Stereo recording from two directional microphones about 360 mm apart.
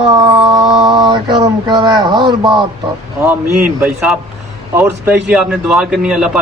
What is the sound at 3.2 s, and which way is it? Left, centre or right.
A man's voice, centre.